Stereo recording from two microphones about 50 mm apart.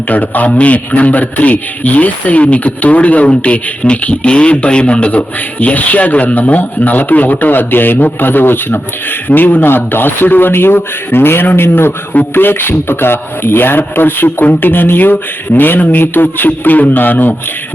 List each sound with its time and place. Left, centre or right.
0.1 s speech: left